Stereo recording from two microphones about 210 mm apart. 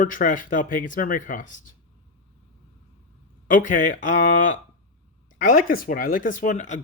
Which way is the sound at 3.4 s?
40° left (ahead or behind).